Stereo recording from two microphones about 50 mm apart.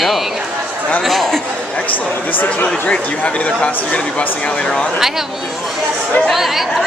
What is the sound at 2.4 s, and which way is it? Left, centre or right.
Speech, left.